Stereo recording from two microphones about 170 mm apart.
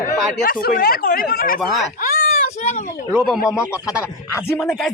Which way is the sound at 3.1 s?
Centre (ahead or behind).